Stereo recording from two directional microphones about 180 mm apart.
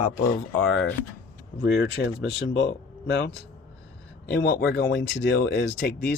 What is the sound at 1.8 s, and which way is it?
Speech, 65° left (ahead or behind).